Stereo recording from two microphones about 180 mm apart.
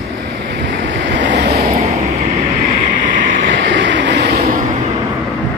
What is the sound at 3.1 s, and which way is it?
Vehicle, 85° right.